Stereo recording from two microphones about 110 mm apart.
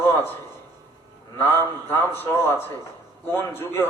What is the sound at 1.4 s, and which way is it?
A man's voice, 20° left (ahead or behind).